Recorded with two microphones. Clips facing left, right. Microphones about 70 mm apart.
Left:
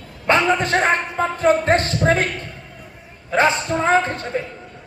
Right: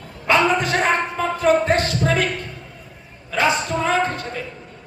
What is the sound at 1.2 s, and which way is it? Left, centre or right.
Speech, left.